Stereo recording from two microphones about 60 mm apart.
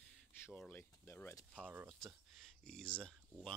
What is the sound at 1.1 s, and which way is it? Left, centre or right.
Speech, left.